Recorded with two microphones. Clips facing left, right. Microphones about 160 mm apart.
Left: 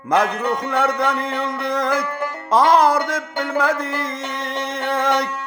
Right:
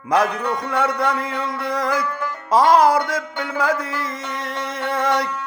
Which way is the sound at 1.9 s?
65° left (ahead or behind).